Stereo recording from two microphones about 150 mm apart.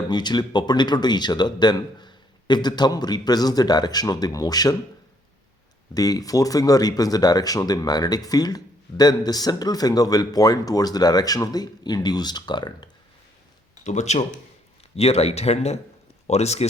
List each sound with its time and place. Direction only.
0.1 s speech: 30° left (ahead or behind)
5.9 s speech: 25° left (ahead or behind)
13.8 s speech: 50° left (ahead or behind)